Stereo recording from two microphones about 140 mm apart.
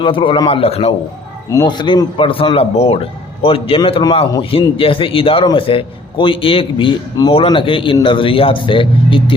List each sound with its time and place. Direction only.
0.0 s a man's voice: 40° left (ahead or behind)
1.5 s a man's voice: 30° left (ahead or behind)